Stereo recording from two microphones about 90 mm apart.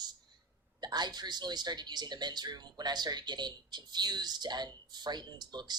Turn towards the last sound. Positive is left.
turn(degrees=-50)  # may be behind; listen again after turning